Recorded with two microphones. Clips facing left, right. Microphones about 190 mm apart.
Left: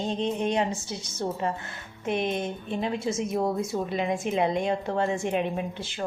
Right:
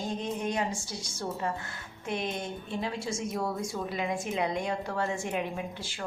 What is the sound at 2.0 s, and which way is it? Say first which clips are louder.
A woman's voice: left 6 dB; 20° left (ahead or behind).